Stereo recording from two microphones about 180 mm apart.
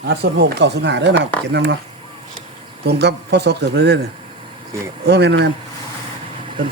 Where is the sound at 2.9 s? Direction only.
70° right (ahead or behind).